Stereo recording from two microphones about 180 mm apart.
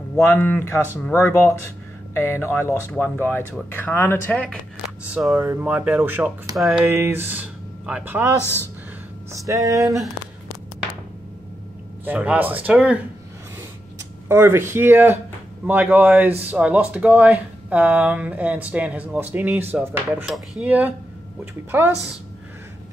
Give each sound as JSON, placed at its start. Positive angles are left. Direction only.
{"t": 0.1, "sound": "speech", "side_deg": 15}
{"t": 5.1, "sound": "speech", "side_deg": -5}
{"t": 6.5, "sound": "speech", "side_deg": 0}
{"t": 6.8, "sound": "speech", "side_deg": -15}
{"t": 8.4, "sound": "speech", "side_deg": 15}
{"t": 9.5, "sound": "speech", "side_deg": -15}
{"t": 12.0, "sound": "speech", "side_deg": -10}
{"t": 14.3, "sound": "speech", "side_deg": -15}